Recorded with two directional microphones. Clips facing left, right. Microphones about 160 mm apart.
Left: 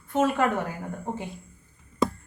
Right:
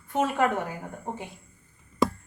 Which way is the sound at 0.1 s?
15° right (ahead or behind).